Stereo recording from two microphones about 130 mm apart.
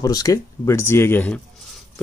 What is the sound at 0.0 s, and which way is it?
Speech, 30° left (ahead or behind).